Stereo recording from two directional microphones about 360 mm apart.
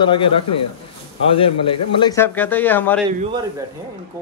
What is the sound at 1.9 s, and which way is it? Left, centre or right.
Speech, centre.